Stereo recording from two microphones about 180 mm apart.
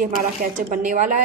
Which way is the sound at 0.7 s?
40° right (ahead or behind).